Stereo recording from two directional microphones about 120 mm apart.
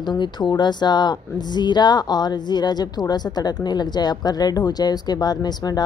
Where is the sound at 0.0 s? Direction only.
35° left (ahead or behind).